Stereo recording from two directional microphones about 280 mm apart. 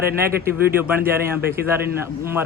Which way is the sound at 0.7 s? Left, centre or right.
Centre.